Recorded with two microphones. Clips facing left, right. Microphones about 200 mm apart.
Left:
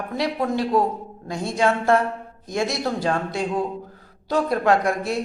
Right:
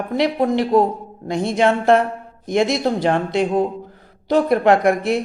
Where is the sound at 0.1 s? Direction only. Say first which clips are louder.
Right 6 dB; 20° right (ahead or behind).